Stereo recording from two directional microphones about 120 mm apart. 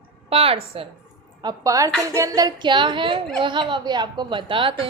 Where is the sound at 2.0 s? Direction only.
25° right (ahead or behind); by 3.1 s 40° right (ahead or behind).